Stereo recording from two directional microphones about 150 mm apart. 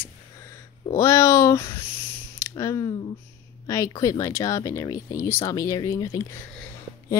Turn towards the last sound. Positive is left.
turn(degrees=25)  # may be behind; listen again after turning